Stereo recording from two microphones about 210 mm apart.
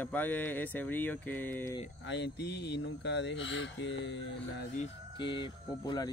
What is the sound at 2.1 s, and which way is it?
Speech, 55° left (ahead or behind).